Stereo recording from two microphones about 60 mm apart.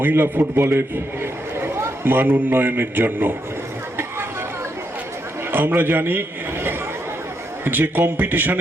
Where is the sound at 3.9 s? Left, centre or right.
Right.